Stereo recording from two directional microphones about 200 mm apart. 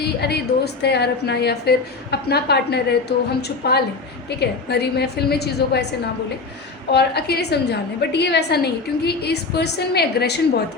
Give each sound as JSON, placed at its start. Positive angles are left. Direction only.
{"t": 0.0, "sound": "a woman's voice", "side_deg": 55}
{"t": 6.9, "sound": "a woman's voice", "side_deg": 55}